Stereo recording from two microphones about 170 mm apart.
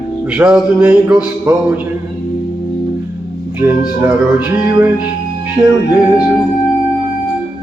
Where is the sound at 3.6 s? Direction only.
10° right (ahead or behind).